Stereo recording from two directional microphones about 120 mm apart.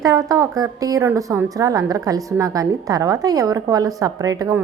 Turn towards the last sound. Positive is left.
turn(degrees=-30)  # may be behind; listen again after turning